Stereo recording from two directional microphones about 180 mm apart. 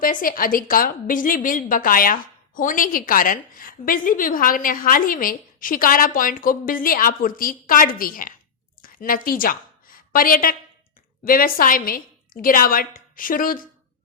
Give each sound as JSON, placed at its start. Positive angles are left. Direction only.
{"t": 0.0, "sound": "a woman's voice", "side_deg": 50}